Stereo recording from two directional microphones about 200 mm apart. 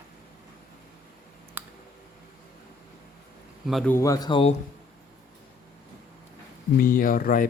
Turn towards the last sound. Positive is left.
turn(degrees=45)  # may be behind; listen again after turning